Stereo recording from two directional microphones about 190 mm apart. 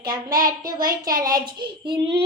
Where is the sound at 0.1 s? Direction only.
20° right (ahead or behind).